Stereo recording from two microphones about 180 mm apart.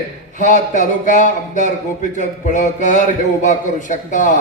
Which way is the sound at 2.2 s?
45° left (ahead or behind).